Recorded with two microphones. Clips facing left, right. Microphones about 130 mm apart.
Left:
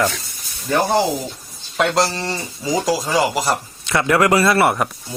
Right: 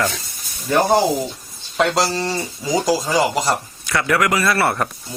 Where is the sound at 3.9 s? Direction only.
25° left (ahead or behind).